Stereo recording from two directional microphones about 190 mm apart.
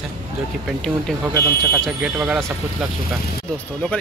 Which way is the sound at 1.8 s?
5° right (ahead or behind).